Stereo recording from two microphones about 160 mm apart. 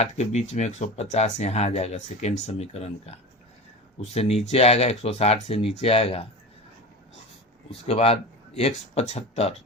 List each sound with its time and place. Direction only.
0.0 s speech: 45° left (ahead or behind)
7.7 s speech: 35° left (ahead or behind)